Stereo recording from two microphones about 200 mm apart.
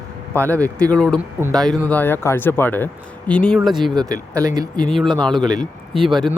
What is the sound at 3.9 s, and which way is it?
Speech, 20° right (ahead or behind).